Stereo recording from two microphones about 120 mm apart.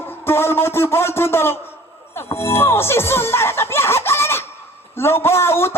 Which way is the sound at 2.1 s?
20° left (ahead or behind).